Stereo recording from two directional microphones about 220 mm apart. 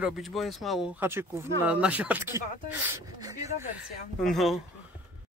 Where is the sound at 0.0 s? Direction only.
Centre (ahead or behind); by 3.4 s 15° right (ahead or behind).